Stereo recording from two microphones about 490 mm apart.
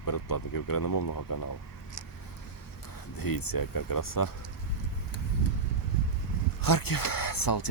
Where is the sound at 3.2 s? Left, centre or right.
Left.